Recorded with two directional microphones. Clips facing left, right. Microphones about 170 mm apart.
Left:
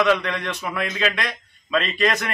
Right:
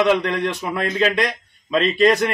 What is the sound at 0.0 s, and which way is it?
A man's voice, 25° right (ahead or behind).